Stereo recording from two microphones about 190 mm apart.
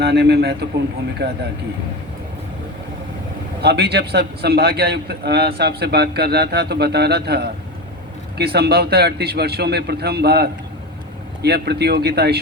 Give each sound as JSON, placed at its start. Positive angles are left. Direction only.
{"t": 0.0, "sound": "a man's voice", "side_deg": -60}
{"t": 3.6, "sound": "a man's voice", "side_deg": -60}